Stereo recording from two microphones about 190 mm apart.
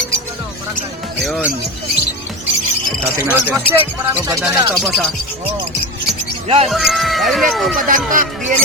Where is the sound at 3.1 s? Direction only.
10° right (ahead or behind).